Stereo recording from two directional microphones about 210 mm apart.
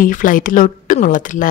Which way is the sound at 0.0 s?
40° left (ahead or behind).